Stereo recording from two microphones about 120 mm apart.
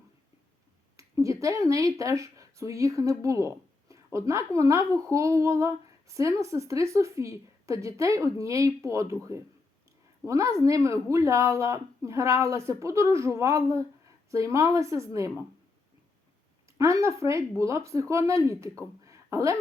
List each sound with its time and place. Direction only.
0.9 s speech: 25° right (ahead or behind)
16.7 s speech: 25° right (ahead or behind)
18.8 s a sound: 25° right (ahead or behind)